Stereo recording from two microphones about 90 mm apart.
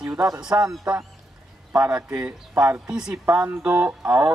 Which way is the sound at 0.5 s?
30° right (ahead or behind).